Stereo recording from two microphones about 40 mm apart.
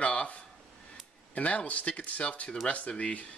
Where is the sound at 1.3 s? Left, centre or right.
Left.